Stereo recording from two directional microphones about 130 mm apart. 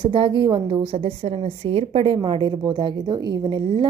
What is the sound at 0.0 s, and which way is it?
A woman's voice, 40° right (ahead or behind).